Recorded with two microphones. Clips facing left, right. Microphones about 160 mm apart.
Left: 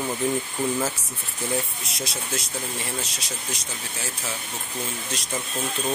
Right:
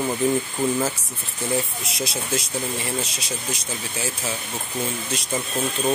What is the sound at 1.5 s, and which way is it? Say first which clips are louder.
Speech: right 4 dB; centre (ahead or behind).